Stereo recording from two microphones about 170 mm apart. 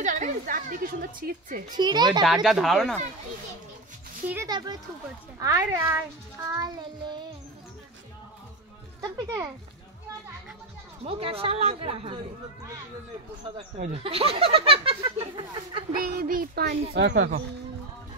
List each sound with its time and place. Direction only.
0.0 s a woman's voice: 50° right (ahead or behind)
1.8 s child singing: 25° right (ahead or behind)
2.2 s speech: centre (ahead or behind)
4.5 s child singing: 25° right (ahead or behind)
5.4 s speech: 20° right (ahead or behind)
6.5 s child singing: 25° right (ahead or behind)
9.0 s child singing: 20° right (ahead or behind)
11.1 s speech: 35° right (ahead or behind)
13.9 s speech: 35° right (ahead or behind)
15.9 s speech: 60° right (ahead or behind)